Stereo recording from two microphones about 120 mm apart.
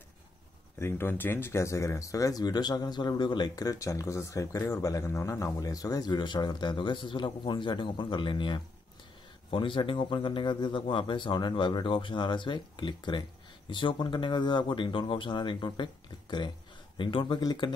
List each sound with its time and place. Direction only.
0.7 s speech: 20° left (ahead or behind); by 17.4 s 45° left (ahead or behind)
17.4 s speech: 35° left (ahead or behind)